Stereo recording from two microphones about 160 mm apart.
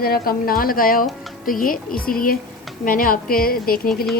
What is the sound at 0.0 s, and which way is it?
Speech, 70° left (ahead or behind).